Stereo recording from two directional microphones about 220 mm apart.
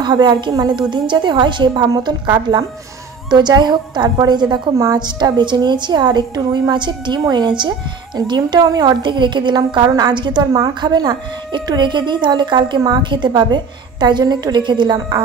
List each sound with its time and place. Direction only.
0.0 s a woman's voice: 20° right (ahead or behind)